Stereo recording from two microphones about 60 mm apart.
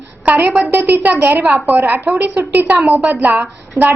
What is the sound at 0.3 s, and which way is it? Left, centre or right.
A woman's voice, right.